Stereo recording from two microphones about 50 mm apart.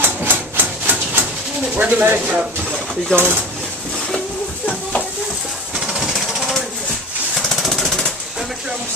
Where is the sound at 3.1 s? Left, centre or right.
Right.